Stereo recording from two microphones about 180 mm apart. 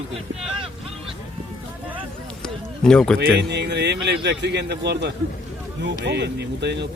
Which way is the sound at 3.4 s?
70° right (ahead or behind).